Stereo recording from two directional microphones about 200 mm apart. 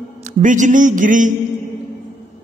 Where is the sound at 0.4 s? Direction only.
40° right (ahead or behind).